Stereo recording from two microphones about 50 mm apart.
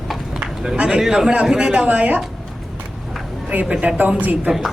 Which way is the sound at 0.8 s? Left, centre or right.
Centre.